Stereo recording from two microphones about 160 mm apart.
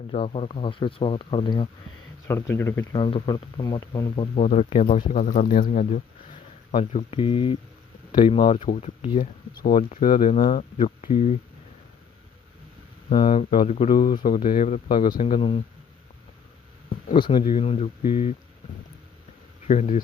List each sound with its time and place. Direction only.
0.1 s speech: 35° left (ahead or behind)
2.2 s speech: 15° left (ahead or behind)
2.9 s speech: 30° left (ahead or behind)
4.4 s speech: 45° left (ahead or behind)
6.7 s speech: 35° left (ahead or behind); by 10.3 s 60° left (ahead or behind)
10.4 s speech: 45° left (ahead or behind)
13.1 s speech: 35° left (ahead or behind)
14.2 s speech: 55° left (ahead or behind)
15.2 s speech: 35° left (ahead or behind)
17.2 s speech: 30° left (ahead or behind)
19.6 s speech: 45° left (ahead or behind)